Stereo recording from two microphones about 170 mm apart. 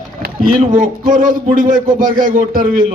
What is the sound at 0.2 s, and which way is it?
A man's voice, 55° right (ahead or behind).